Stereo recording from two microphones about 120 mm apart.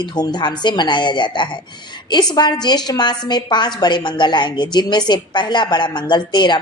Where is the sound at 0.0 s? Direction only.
35° left (ahead or behind).